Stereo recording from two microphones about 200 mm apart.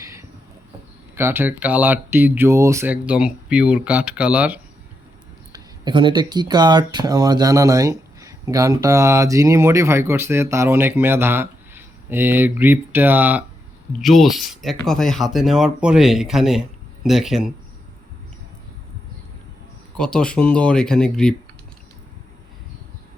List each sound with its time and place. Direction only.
0.0 s a sound: 15° right (ahead or behind)
1.1 s speech: 10° right (ahead or behind)
5.5 s speech: 20° right (ahead or behind); by 17.5 s centre (ahead or behind)
20.0 s speech: 5° left (ahead or behind)